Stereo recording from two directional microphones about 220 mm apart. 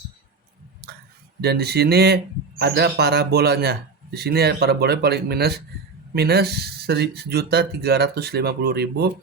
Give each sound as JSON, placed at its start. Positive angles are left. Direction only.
{"t": 1.4, "sound": "a man's voice", "side_deg": -45}